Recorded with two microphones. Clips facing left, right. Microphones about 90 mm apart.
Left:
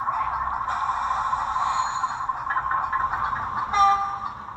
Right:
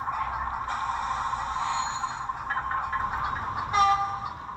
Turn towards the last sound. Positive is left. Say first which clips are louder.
# left 3 dB
turn(degrees=35)  # may be behind; listen again after turning